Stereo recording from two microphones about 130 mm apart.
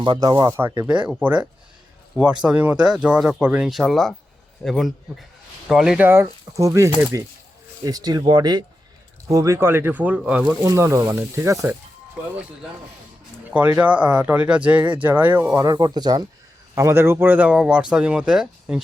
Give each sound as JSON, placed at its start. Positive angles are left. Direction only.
{"t": 0.0, "sound": "speech", "side_deg": -35}
{"t": 0.9, "sound": "speech", "side_deg": -10}
{"t": 6.1, "sound": "speech", "side_deg": -25}
{"t": 10.6, "sound": "speech", "side_deg": -25}
{"t": 13.5, "sound": "speech", "side_deg": -10}
{"t": 15.5, "sound": "speech", "side_deg": -30}
{"t": 16.7, "sound": "speech", "side_deg": -20}